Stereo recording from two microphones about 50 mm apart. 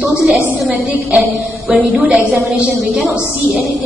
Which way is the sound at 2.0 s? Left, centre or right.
Right.